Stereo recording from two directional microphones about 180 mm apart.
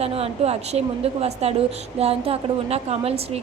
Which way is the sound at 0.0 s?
35° right (ahead or behind).